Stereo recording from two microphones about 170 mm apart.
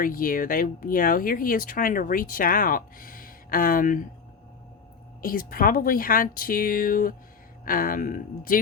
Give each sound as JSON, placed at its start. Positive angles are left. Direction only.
{"t": 0.0, "sound": "speech", "side_deg": 55}
{"t": 5.2, "sound": "speech", "side_deg": 55}